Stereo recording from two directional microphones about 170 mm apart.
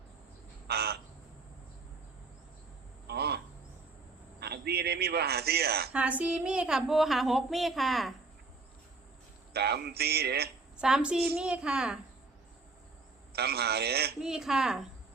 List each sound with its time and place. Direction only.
0.7 s a sound: 70° right (ahead or behind)
3.1 s cricket: 70° right (ahead or behind)
4.4 s a man's voice: 75° right (ahead or behind)
5.9 s a woman's voice: 10° right (ahead or behind)
9.5 s a man's voice: 70° right (ahead or behind)
10.8 s a woman's voice: 5° right (ahead or behind)
13.3 s a man's voice: 70° right (ahead or behind)
14.2 s a woman's voice: 5° right (ahead or behind)